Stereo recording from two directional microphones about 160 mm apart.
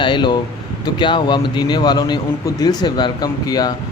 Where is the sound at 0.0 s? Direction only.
30° left (ahead or behind).